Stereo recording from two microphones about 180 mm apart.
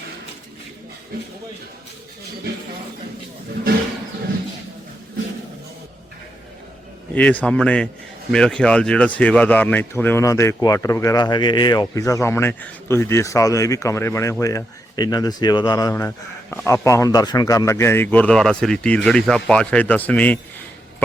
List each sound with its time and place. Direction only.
7.1 s speech: 5° left (ahead or behind)